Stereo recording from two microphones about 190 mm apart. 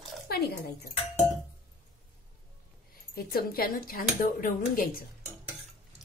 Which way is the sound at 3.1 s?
50° left (ahead or behind).